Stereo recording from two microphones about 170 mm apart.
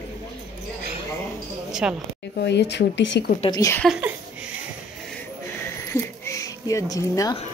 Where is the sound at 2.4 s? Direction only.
85° left.